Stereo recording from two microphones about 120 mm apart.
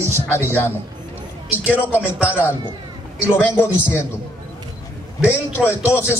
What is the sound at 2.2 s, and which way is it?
Speech, 15° right (ahead or behind).